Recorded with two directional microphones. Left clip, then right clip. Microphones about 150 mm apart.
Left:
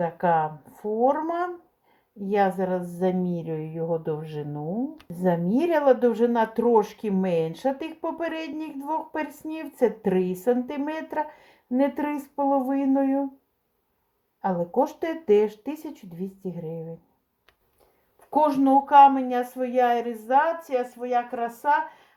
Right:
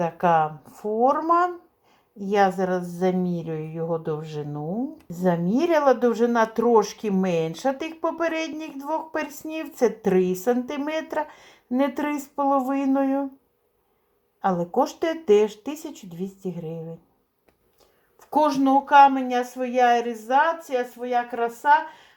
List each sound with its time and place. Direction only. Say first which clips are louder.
0.0 s a woman's voice: right 2 dB; 15° right (ahead or behind)
14.4 s a woman's voice: right 2 dB; 20° right (ahead or behind)
18.2 s a woman's voice: right 1 dB; 15° right (ahead or behind); by 21.8 s centre (ahead or behind)